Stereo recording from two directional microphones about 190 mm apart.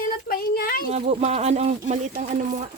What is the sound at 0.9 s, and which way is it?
Speech, 35° right (ahead or behind).